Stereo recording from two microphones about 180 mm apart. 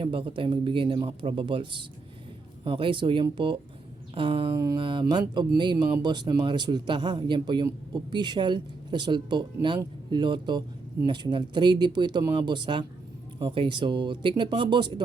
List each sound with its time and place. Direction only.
0.0 s speech: 30° right (ahead or behind)